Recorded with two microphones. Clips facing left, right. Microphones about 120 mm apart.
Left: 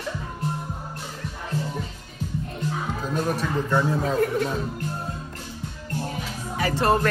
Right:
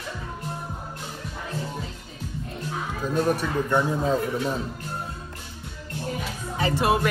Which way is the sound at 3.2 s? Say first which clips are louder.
Right 1 dB; 10° right (ahead or behind).